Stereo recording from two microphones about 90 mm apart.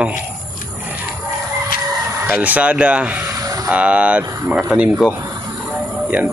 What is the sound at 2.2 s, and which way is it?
Speech, 20° right (ahead or behind).